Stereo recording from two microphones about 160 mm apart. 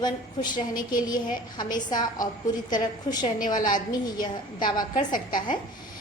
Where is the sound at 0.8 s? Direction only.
25° left (ahead or behind).